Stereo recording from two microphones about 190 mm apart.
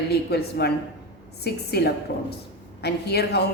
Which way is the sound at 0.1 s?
55° left (ahead or behind).